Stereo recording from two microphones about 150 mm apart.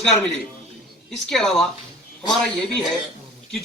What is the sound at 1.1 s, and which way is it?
A man's voice, 5° left (ahead or behind).